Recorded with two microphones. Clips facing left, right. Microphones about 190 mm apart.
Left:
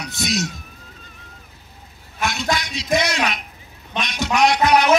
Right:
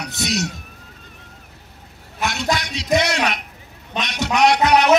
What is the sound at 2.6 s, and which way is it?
Music, 70° right (ahead or behind).